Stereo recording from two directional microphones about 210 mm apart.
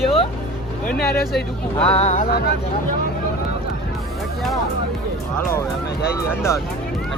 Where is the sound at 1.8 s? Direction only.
30° left (ahead or behind).